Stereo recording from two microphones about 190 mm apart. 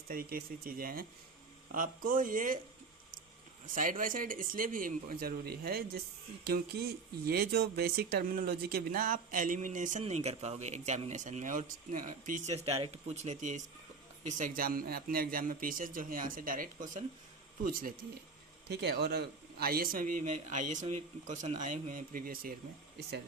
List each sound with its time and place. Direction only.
0.1 s speech: 50° right (ahead or behind)
3.7 s a man's voice: 45° right (ahead or behind)